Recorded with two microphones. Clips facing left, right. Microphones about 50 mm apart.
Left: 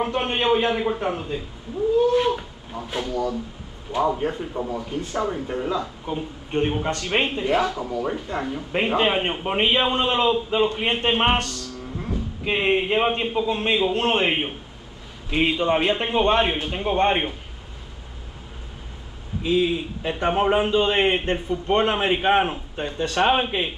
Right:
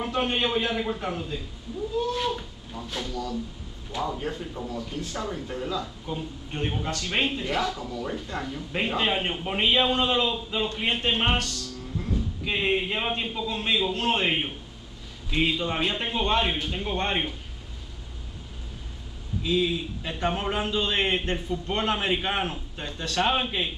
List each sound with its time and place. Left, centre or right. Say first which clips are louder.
0.0 s a man's voice: left 4 dB; left
19.4 s a man's voice: left 4 dB; left